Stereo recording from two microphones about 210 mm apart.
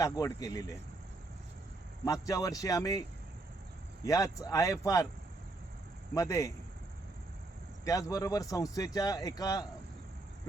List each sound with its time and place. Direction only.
0.0 s a man's voice: 15° left (ahead or behind)
2.2 s a man's voice: 15° left (ahead or behind)
4.0 s a man's voice: 15° left (ahead or behind)
6.1 s a man's voice: 15° left (ahead or behind)
7.9 s a man's voice: 15° left (ahead or behind)